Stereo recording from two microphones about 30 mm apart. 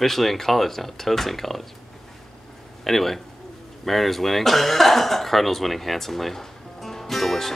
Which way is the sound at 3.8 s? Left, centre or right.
Centre.